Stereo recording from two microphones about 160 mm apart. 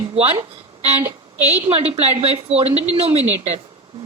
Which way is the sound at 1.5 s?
40° right (ahead or behind).